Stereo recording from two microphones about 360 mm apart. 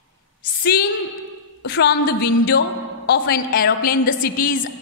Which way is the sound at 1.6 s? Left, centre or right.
Left.